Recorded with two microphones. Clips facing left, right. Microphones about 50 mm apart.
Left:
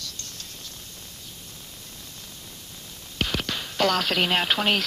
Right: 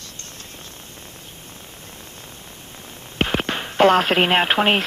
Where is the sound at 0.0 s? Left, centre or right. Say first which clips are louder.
Right 1 dB; right.